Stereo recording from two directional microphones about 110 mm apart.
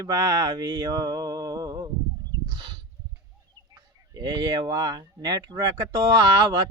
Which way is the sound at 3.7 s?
40° right (ahead or behind).